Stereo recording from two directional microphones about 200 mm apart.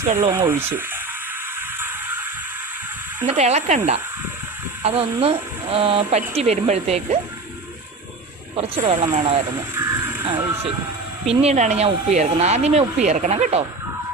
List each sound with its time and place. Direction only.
0.2 s speech: 10° right (ahead or behind)
3.2 s speech: 35° right (ahead or behind)
4.8 s speech: 30° right (ahead or behind)
8.5 s speech: 30° right (ahead or behind)
9.8 s music: 15° right (ahead or behind)
10.2 s speech: 25° right (ahead or behind)
11.3 s speech: 35° right (ahead or behind)